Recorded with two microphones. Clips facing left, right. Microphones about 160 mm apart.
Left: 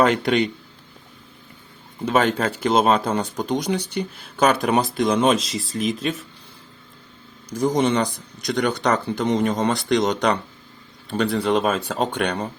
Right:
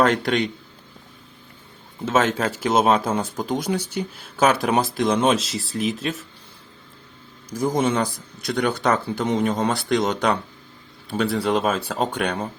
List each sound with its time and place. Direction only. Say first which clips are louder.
0.0 s speech: left 1 dB; centre (ahead or behind)
2.0 s speech: left 1 dB; centre (ahead or behind)
7.5 s speech: left 2 dB; 10° right (ahead or behind)